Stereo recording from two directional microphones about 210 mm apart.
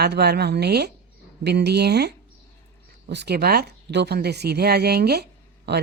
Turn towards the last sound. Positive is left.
turn(degrees=-55)  # may be behind; listen again after turning